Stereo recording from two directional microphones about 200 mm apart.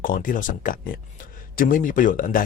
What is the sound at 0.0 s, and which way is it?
Speech, 40° left (ahead or behind).